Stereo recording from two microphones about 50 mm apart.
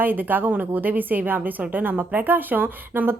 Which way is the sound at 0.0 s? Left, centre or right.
Right.